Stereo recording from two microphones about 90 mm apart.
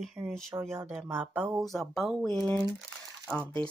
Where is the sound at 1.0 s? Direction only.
15° right (ahead or behind).